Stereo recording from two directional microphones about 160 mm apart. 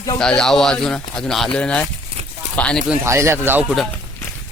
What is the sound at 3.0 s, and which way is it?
Speech, 15° right (ahead or behind).